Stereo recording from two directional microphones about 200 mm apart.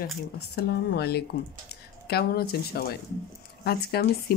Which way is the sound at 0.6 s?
55° left (ahead or behind).